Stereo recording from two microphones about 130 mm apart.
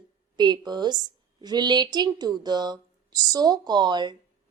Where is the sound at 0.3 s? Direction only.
35° right (ahead or behind).